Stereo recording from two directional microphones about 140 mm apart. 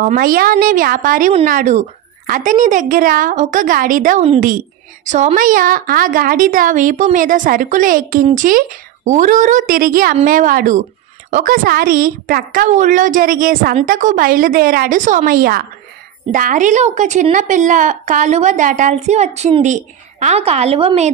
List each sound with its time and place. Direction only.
0.0 s a woman's voice: 80° right
1.4 s a woman's voice: 65° right (ahead or behind)
5.0 s a woman's voice: 60° right (ahead or behind); by 10.8 s 85° right
11.2 s a woman's voice: 70° right (ahead or behind); by 15.6 s 90° right
16.3 s a woman's voice: 70° right (ahead or behind); by 21.1 s 45° right (ahead or behind)